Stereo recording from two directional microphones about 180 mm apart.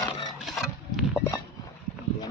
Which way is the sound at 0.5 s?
Centre (ahead or behind).